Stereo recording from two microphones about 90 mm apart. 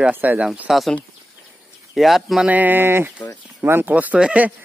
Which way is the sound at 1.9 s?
Centre (ahead or behind).